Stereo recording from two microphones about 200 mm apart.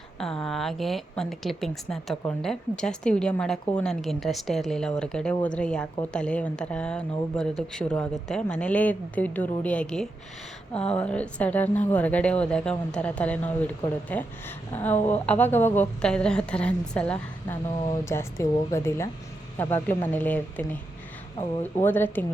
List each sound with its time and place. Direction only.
0.2 s a woman's voice: centre (ahead or behind)
14.9 s a woman's voice: 35° left (ahead or behind)
15.3 s a woman's voice: 10° left (ahead or behind)